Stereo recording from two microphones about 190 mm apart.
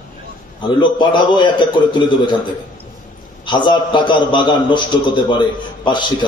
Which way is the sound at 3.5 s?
25° left (ahead or behind).